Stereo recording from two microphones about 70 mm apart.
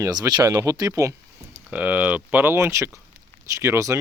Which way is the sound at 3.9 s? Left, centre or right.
Right.